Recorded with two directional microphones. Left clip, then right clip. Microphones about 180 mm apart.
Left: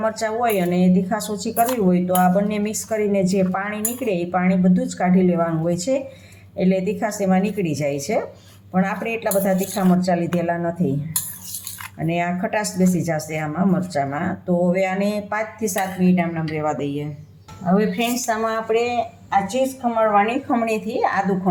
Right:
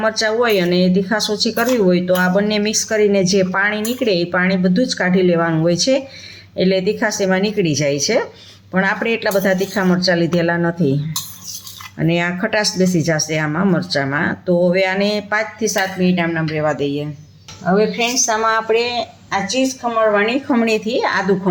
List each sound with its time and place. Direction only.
0.0 s a woman's voice: 45° right (ahead or behind)
11.9 s a woman's voice: 45° right (ahead or behind)